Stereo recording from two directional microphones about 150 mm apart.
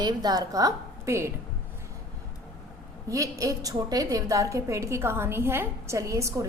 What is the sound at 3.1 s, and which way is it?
A woman's voice, 20° right (ahead or behind).